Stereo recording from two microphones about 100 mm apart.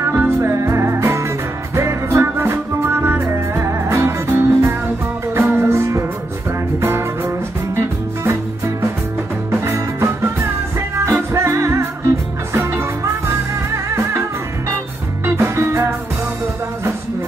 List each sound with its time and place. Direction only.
0.0 s music: 25° right (ahead or behind)
9.5 s music: 30° right (ahead or behind)
15.2 s music: 30° right (ahead or behind)